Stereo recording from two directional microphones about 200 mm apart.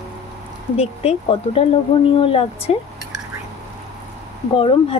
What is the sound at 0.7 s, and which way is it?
Speech, 30° left (ahead or behind).